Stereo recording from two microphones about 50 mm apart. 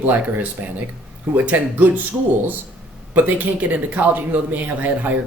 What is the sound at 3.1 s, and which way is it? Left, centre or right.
Speech, right.